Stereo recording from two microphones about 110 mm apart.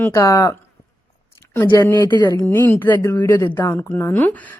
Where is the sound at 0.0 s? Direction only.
30° left (ahead or behind).